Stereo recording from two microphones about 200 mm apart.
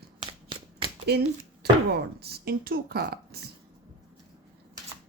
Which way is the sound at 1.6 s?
55° right (ahead or behind).